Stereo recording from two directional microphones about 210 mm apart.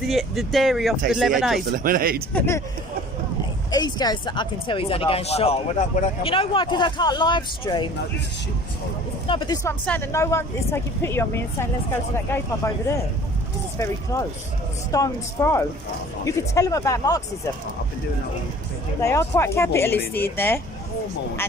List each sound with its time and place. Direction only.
0.1 s speech: centre (ahead or behind)
1.7 s speech: 40° right (ahead or behind)
3.7 s speech: 20° left (ahead or behind)
9.2 s speech: 25° left (ahead or behind)
9.8 s speech: 10° left (ahead or behind)
19.0 s speech: 15° left (ahead or behind)